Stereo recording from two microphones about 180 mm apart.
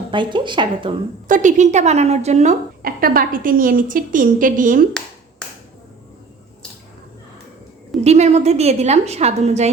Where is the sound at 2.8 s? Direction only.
55° right (ahead or behind).